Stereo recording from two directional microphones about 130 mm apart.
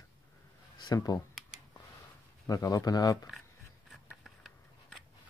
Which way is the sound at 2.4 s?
25° left (ahead or behind).